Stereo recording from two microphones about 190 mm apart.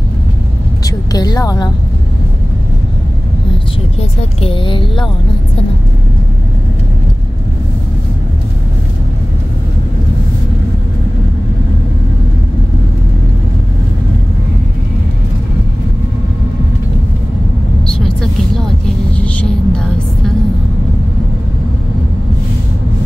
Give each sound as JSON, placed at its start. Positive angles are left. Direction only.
{"t": 0.8, "sound": "speech", "side_deg": 20}
{"t": 4.4, "sound": "speech", "side_deg": 25}
{"t": 17.8, "sound": "vehicle", "side_deg": 5}
{"t": 19.2, "sound": "a sound", "side_deg": 5}